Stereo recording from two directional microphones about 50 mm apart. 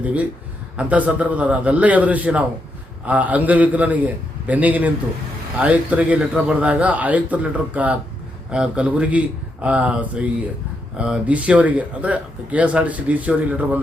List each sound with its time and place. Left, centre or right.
0.0 s a man's voice: right
8.4 s speech: centre